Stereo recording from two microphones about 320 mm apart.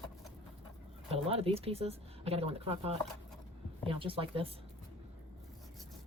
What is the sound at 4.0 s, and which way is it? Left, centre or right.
Speech, centre.